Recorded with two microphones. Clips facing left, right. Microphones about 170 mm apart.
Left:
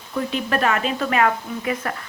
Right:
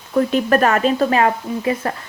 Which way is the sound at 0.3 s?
45° right (ahead or behind).